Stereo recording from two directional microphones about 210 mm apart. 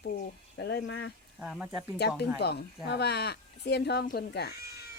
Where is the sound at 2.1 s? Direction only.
50° left (ahead or behind).